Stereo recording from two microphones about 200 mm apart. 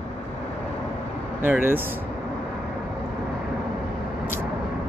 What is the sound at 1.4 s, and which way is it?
Speech, 10° right (ahead or behind).